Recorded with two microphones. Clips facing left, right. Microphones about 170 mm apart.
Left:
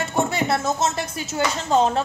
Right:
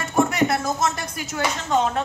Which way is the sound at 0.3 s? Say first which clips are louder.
Right 1 dB; 25° left (ahead or behind).